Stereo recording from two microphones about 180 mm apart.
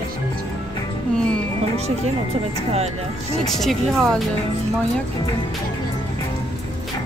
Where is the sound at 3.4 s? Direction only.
Centre (ahead or behind).